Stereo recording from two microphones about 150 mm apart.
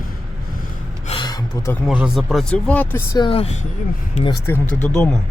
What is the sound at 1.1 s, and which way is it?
Gasp, 30° left (ahead or behind).